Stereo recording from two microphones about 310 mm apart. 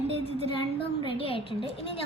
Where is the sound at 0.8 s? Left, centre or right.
Centre.